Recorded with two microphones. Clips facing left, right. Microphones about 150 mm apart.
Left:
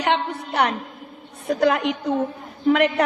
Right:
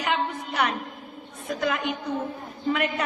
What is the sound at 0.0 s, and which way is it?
A woman's voice, 75° left (ahead or behind).